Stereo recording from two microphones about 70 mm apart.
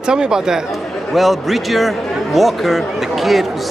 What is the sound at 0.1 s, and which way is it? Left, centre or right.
Speech, centre.